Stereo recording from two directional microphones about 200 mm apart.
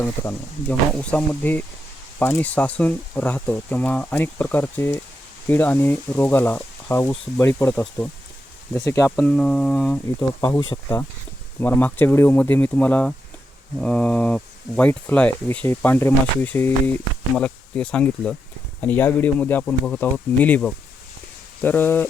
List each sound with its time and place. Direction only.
0.0 s speech: 10° left (ahead or behind)
9.2 s a sound: 5° left (ahead or behind)
10.2 s speech: 20° left (ahead or behind)
11.6 s speech: 10° left (ahead or behind)